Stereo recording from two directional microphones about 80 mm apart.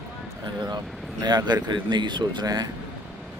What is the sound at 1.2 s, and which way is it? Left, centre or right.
Speech, right.